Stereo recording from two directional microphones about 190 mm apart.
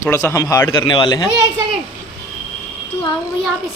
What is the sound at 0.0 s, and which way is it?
Speech, 15° left (ahead or behind).